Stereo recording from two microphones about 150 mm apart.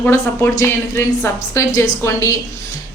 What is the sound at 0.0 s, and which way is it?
A woman's voice, 15° left (ahead or behind).